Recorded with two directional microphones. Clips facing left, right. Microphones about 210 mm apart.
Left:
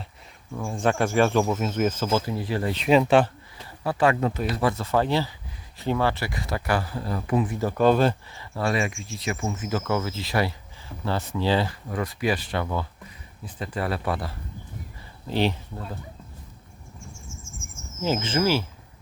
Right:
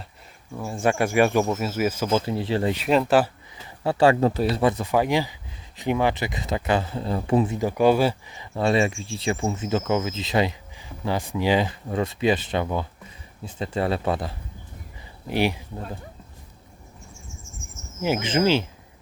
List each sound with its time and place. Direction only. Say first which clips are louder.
0.5 s speech: right 1 dB; 5° right (ahead or behind)
2.2 s speech: right 3 dB; 25° right (ahead or behind)
2.7 s speech: left 3 dB; centre (ahead or behind)
3.8 s speech: right 4 dB; 30° right (ahead or behind); by 16.0 s 15° right (ahead or behind)
18.0 s speech: right 2 dB; 15° right (ahead or behind)